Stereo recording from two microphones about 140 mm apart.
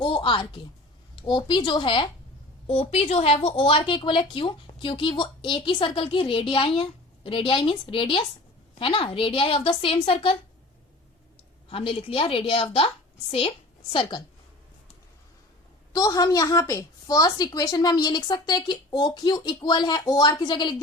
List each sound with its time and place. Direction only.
0.0 s a child's voice: 35° left (ahead or behind)
11.7 s a woman's voice: 40° left (ahead or behind)
13.9 s a woman's voice: 35° left (ahead or behind)
15.9 s a woman's voice: 25° left (ahead or behind)